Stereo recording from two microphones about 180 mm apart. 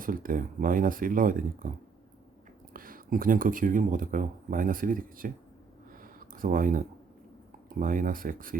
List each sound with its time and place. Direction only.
0.0 s speech: 50° right (ahead or behind)
2.7 s speech: 50° right (ahead or behind)
6.0 s a sound: 50° right (ahead or behind)
7.7 s speech: 50° right (ahead or behind)